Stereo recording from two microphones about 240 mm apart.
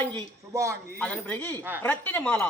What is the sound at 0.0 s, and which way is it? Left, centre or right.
Speech, centre.